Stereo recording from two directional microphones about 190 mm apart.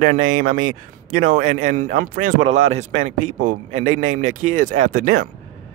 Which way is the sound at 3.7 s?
90° right.